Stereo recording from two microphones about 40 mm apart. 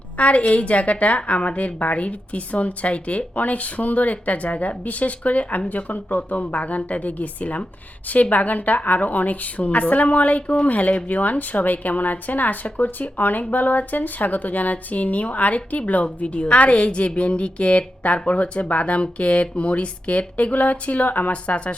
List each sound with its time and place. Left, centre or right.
0.2 s a woman's voice: left
21.5 s a woman's voice: left